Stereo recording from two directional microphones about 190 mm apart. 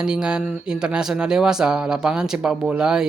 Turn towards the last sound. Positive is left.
turn(degrees=-5)  # may be behind; listen again after turning